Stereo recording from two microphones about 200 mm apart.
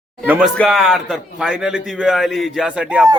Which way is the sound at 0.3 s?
10° right (ahead or behind).